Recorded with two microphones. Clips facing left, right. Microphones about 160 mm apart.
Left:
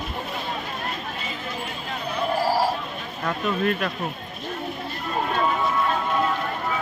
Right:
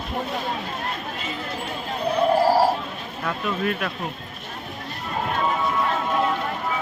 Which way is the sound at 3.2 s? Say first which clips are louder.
Left 2 dB; 5° right (ahead or behind).